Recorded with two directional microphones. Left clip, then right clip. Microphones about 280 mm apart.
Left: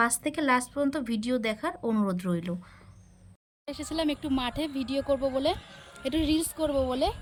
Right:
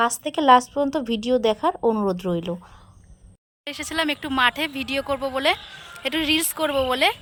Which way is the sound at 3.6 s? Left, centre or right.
Centre.